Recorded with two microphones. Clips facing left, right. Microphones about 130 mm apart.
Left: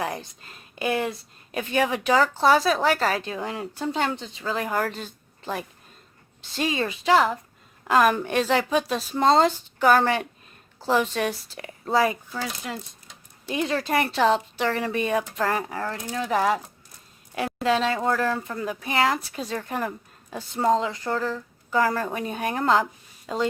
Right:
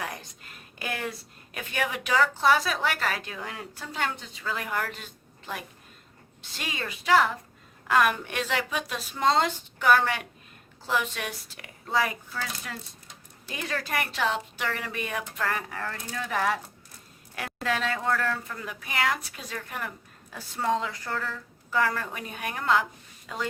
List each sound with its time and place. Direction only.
0.0 s a woman's voice: 30° left (ahead or behind)
12.3 s a woman's voice: 20° left (ahead or behind)